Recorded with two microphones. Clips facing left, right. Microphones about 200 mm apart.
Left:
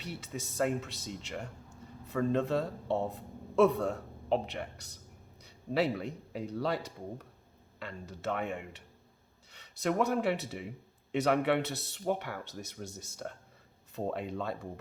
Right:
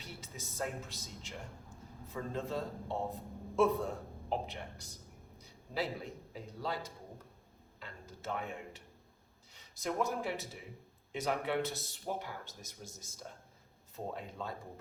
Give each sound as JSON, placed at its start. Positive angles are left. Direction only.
{"t": 0.0, "sound": "a man's voice", "side_deg": 70}
{"t": 5.4, "sound": "a sound", "side_deg": 70}
{"t": 6.3, "sound": "speech", "side_deg": 70}
{"t": 7.8, "sound": "speech", "side_deg": 70}